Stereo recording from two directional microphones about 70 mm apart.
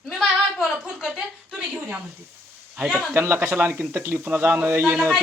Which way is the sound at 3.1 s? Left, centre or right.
Right.